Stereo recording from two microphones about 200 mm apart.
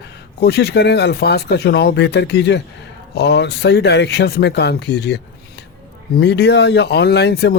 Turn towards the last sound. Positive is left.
turn(degrees=55)  # may be behind; listen again after turning